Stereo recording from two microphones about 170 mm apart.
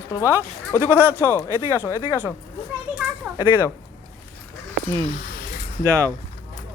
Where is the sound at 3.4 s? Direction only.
15° right (ahead or behind).